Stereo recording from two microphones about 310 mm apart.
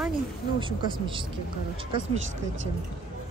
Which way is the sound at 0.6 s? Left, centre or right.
Centre.